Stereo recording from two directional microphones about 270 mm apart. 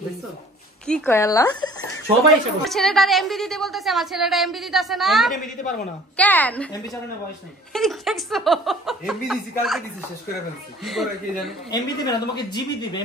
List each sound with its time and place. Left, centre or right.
0.8 s speech: centre
2.6 s a woman's voice: centre
5.3 s a woman's voice: left
6.1 s a woman's voice: centre
11.7 s speech: centre